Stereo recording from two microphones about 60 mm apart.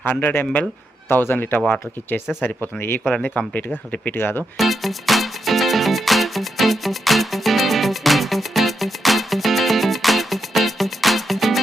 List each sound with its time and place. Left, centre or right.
0.0 s a man's voice: left
4.5 s music: centre